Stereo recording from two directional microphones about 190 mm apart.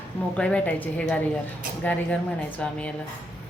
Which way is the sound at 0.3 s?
5° left (ahead or behind).